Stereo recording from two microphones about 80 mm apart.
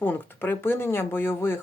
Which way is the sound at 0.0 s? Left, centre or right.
Left.